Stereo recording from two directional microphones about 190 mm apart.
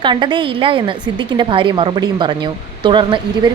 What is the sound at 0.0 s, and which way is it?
A woman's voice, 25° right (ahead or behind).